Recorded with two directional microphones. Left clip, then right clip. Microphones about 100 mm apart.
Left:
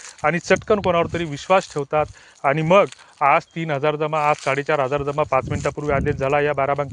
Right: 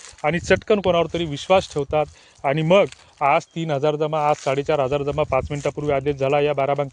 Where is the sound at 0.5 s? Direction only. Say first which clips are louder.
Right 1 dB; 30° right (ahead or behind).